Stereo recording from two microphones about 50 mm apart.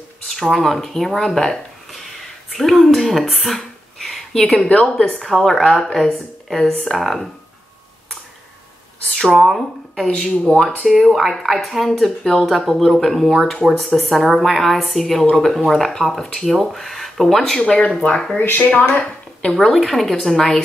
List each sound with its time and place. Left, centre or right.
0.3 s a sound: centre
0.7 s speech: centre
4.6 s a woman's voice: left
5.2 s speech: centre
9.3 s speech: centre
10.0 s a woman's voice: left
10.4 s a woman's voice: centre
17.6 s a woman's voice: left
19.5 s a woman's voice: centre